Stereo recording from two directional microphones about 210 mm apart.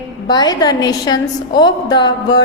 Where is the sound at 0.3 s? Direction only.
20° left (ahead or behind).